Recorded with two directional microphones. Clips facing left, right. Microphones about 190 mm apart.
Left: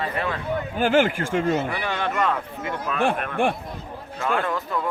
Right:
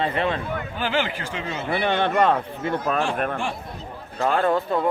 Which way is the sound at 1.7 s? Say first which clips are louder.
Right 5 dB; 30° right (ahead or behind).